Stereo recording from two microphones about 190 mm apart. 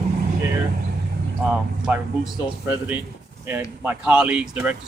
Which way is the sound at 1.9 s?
5° right (ahead or behind).